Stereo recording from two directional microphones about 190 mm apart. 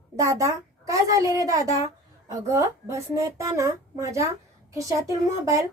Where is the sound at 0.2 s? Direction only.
15° right (ahead or behind).